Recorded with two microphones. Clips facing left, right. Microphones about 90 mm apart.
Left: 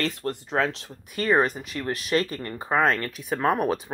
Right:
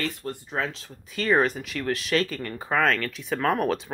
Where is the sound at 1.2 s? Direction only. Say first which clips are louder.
Even; 5° left (ahead or behind).